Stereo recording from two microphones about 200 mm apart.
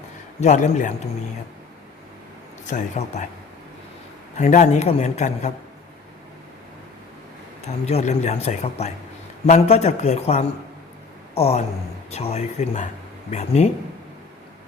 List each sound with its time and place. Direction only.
0.3 s a man's voice: 35° left (ahead or behind)
2.6 s a man's voice: 35° left (ahead or behind)
4.4 s a man's voice: 35° left (ahead or behind)
7.9 s a man's voice: 35° left (ahead or behind)